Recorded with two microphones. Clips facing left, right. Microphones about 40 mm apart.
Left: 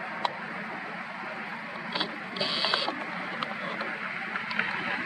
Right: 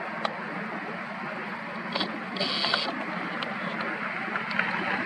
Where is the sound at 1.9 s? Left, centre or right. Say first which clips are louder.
Right 2 dB; centre.